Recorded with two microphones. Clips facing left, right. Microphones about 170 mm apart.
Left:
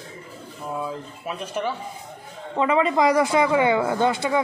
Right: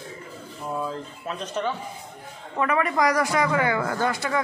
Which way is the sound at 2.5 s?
20° left (ahead or behind).